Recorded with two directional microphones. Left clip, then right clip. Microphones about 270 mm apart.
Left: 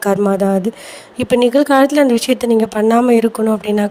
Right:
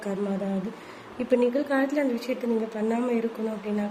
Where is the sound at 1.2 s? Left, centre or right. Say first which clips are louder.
Left 11 dB; left.